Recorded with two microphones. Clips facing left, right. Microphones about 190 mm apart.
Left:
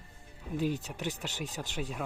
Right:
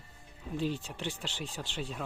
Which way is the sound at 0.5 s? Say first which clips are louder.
Left 2 dB; 10° left (ahead or behind).